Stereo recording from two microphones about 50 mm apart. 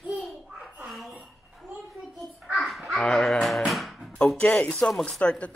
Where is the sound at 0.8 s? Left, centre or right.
Centre.